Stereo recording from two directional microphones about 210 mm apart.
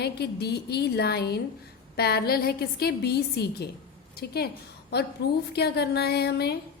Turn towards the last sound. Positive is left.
turn(degrees=50)  # may be behind; listen again after turning